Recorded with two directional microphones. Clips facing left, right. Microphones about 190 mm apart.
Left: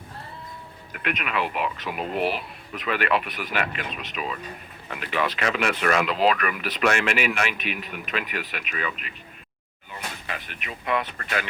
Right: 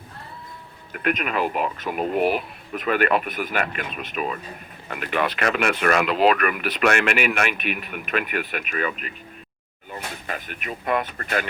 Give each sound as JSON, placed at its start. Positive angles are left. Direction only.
{"t": 0.9, "sound": "speech", "side_deg": -45}